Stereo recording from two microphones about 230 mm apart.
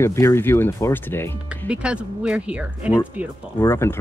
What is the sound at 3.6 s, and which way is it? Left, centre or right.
Speech, centre.